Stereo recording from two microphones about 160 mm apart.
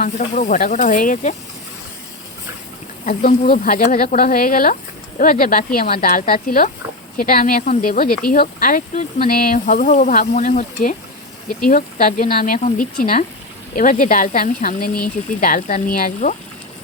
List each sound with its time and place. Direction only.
0.0 s speech: 55° left (ahead or behind)
3.1 s speech: 60° left (ahead or behind)